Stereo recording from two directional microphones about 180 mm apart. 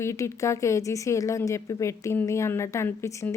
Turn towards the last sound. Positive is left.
turn(degrees=15)  # may be behind; listen again after turning